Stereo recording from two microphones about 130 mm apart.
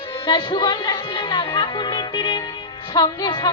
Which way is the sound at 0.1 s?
40° left (ahead or behind).